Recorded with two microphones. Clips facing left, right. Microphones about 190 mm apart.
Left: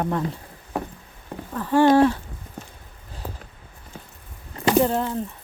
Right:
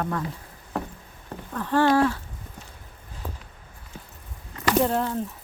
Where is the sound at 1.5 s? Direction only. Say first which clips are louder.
Left 4 dB; 10° left (ahead or behind).